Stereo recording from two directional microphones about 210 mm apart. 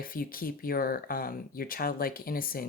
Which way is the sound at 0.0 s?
45° left (ahead or behind).